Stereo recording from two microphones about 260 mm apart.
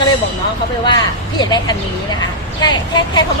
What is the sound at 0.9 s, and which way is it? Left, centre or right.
Speech, centre.